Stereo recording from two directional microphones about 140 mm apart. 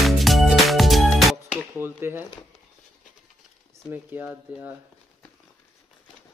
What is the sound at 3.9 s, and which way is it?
Speech, 15° right (ahead or behind).